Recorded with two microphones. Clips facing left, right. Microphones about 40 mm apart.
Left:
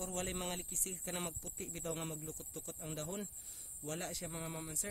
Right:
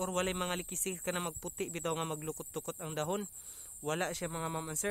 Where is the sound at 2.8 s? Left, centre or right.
Right.